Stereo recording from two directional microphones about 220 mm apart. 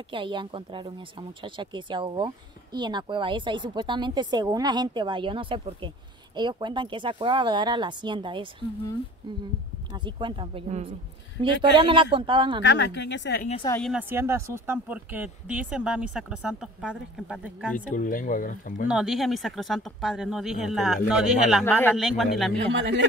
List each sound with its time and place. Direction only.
0.1 s speech: 20° right (ahead or behind)
9.9 s speech: 20° right (ahead or behind)
12.6 s a woman's voice: 50° left (ahead or behind)
13.7 s speech: 5° left (ahead or behind)
13.9 s speech: 10° right (ahead or behind)
17.7 s speech: 35° left (ahead or behind)
18.9 s speech: 5° right (ahead or behind)
21.6 s speech: 10° left (ahead or behind)
22.7 s speech: 55° right (ahead or behind)